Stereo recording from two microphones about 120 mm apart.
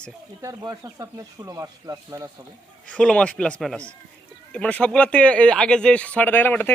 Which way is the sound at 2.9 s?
10° left (ahead or behind).